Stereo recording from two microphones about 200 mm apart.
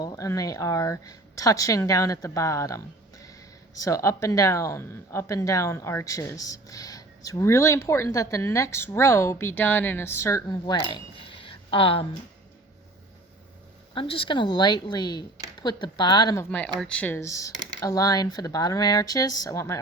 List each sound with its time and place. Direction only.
0.0 s speech: 15° left (ahead or behind)
13.9 s speech: 25° left (ahead or behind)